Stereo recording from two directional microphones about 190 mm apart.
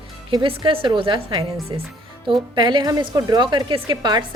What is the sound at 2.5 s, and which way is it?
Speech, 25° right (ahead or behind).